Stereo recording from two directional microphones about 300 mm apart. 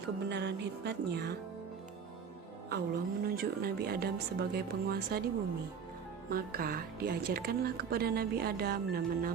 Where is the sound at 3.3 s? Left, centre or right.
Right.